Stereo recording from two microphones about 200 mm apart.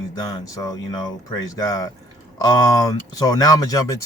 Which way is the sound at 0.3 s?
20° left (ahead or behind).